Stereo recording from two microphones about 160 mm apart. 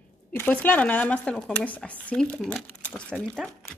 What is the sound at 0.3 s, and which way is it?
Speech, 10° left (ahead or behind).